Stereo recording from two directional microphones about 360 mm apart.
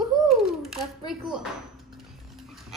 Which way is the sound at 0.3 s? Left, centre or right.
Centre.